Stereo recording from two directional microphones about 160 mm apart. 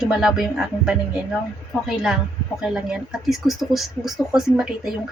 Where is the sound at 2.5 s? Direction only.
5° right (ahead or behind).